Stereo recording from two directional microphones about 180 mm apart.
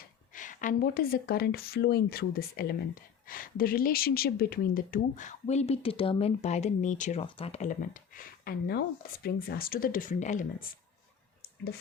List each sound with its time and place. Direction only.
0.3 s speech: 45° left (ahead or behind)